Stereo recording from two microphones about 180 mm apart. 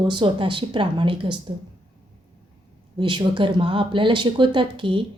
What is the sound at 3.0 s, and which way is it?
Speech, 25° right (ahead or behind).